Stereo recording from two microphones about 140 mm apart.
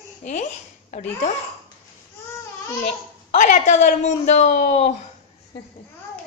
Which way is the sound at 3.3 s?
60° left (ahead or behind).